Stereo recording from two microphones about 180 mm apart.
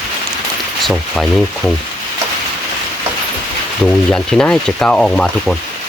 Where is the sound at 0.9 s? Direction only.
Centre (ahead or behind).